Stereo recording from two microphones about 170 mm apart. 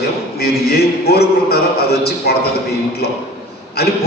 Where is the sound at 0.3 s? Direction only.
65° left (ahead or behind).